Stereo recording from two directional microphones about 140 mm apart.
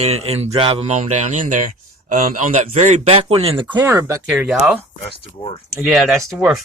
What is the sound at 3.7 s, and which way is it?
Speech, 25° right (ahead or behind).